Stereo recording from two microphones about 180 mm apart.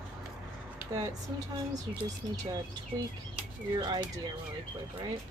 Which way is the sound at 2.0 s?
20° right (ahead or behind).